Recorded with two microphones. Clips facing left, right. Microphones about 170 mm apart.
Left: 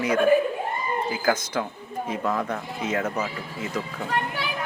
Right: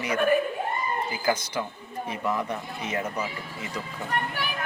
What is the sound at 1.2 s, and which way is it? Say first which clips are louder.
Speech: left 2 dB; 55° left (ahead or behind).